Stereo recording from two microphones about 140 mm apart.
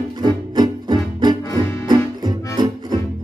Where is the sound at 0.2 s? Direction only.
30° right (ahead or behind).